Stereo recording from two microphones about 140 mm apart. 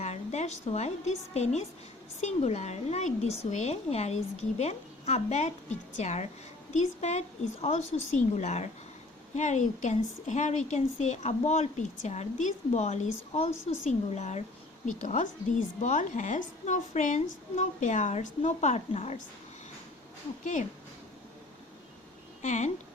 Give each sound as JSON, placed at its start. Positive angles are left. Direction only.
{"t": 0.0, "sound": "a woman's voice", "side_deg": 55}
{"t": 14.8, "sound": "a woman's voice", "side_deg": 65}
{"t": 20.4, "sound": "a woman's voice", "side_deg": 65}
{"t": 22.4, "sound": "speech", "side_deg": 55}